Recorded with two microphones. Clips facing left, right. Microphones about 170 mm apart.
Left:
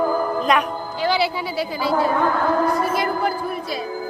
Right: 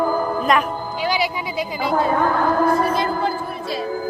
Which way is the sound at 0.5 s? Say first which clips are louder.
Right 1 dB; centre (ahead or behind).